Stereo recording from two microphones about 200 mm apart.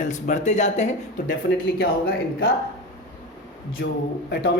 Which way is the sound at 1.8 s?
50° left (ahead or behind).